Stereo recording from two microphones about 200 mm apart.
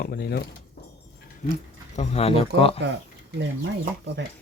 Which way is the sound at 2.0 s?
30° left (ahead or behind).